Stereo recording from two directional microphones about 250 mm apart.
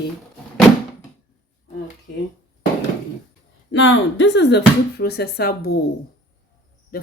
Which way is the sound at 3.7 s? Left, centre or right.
Left.